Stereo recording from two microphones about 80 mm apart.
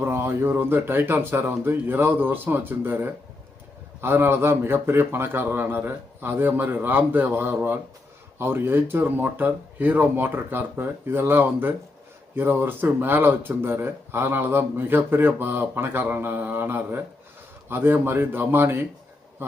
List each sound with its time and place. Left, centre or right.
0.0 s speech: right